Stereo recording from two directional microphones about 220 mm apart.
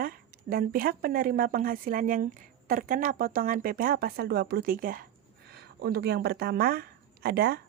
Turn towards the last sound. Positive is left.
turn(degrees=-45)  # may be behind; listen again after turning